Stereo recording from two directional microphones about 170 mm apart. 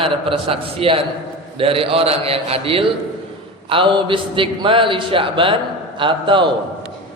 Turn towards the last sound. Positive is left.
turn(degrees=-30)  # may be behind; listen again after turning